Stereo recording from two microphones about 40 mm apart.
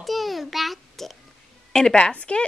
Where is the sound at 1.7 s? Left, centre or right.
Centre.